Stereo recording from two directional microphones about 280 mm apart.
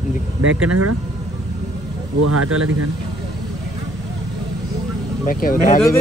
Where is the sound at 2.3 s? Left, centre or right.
Right.